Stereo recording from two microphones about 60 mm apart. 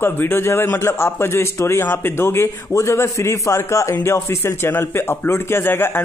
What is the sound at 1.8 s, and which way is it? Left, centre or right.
A man's voice, left.